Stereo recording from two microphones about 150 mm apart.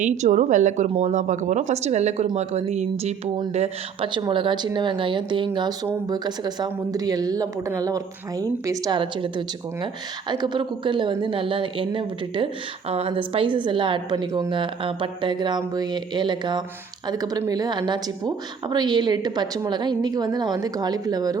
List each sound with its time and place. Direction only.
0.0 s a woman's voice: 55° right (ahead or behind)
4.1 s speech: 30° right (ahead or behind)
9.0 s a woman's voice: 35° right (ahead or behind)